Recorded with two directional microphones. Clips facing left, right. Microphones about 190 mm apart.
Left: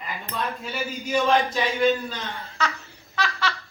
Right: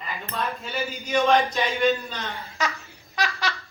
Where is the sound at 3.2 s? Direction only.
15° right (ahead or behind).